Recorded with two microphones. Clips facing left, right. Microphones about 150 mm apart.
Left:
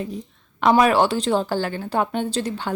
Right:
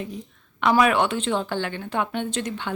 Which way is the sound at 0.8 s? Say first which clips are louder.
Left 1 dB; 35° left (ahead or behind).